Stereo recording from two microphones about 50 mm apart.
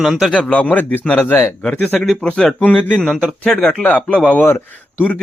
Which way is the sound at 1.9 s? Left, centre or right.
Centre.